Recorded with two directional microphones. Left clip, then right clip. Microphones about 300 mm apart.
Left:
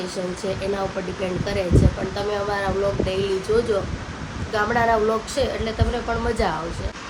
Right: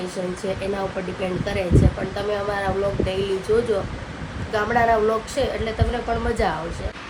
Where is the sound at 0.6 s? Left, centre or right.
Centre.